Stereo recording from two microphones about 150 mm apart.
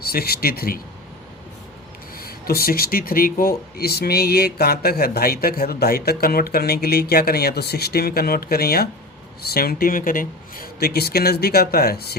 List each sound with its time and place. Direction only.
0.0 s speech: 90° left
2.1 s speech: 85° left